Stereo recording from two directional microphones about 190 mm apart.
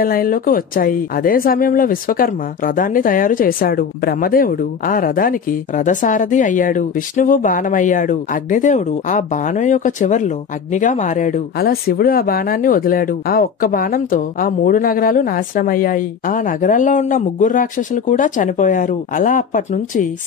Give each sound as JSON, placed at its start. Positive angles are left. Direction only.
{"t": 0.0, "sound": "speech", "side_deg": 50}